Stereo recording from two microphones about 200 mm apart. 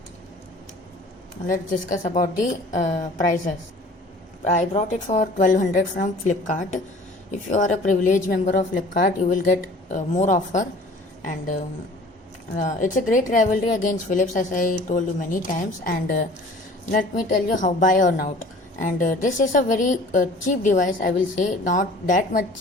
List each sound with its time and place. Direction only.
1.5 s a woman's voice: 40° left (ahead or behind)
12.5 s a woman's voice: 40° left (ahead or behind)
17.6 s a woman's voice: 40° left (ahead or behind)